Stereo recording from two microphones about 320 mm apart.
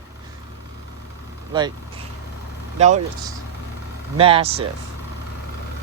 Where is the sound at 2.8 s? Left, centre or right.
Right.